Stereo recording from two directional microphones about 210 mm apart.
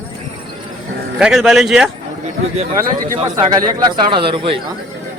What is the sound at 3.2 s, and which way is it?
Speech, 20° right (ahead or behind).